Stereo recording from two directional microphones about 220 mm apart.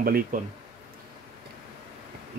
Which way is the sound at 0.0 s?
40° right (ahead or behind).